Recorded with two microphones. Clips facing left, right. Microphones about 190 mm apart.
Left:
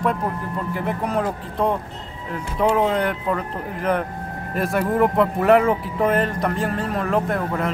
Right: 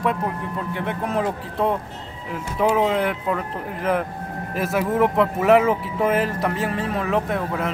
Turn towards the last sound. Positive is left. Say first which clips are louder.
# left 1 dB
turn(degrees=0)  # may be behind; listen again after turning